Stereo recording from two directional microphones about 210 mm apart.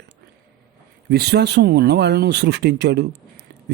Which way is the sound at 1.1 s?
50° right (ahead or behind).